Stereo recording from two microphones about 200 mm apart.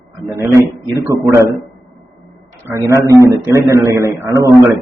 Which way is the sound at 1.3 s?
15° right (ahead or behind).